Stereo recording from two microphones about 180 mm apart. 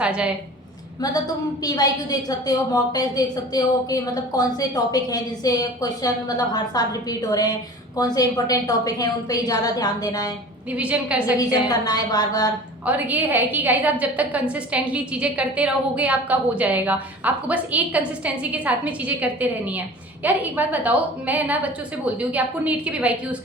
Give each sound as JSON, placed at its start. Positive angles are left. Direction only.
{"t": 0.0, "sound": "a woman's voice", "side_deg": -5}
{"t": 1.6, "sound": "a woman's voice", "side_deg": 20}
{"t": 10.7, "sound": "a woman's voice", "side_deg": -10}
{"t": 11.3, "sound": "a woman's voice", "side_deg": 20}
{"t": 12.8, "sound": "a woman's voice", "side_deg": -10}